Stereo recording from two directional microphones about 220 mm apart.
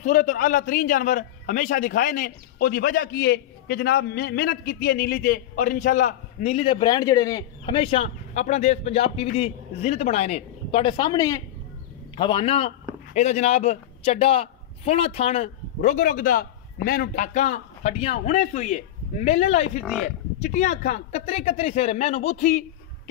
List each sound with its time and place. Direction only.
0.0 s a man's voice: 40° left (ahead or behind)